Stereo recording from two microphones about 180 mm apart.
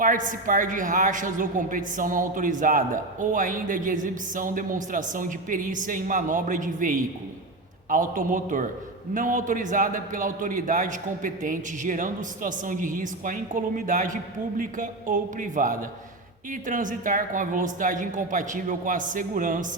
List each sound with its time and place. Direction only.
0.0 s a man's voice: 45° right (ahead or behind)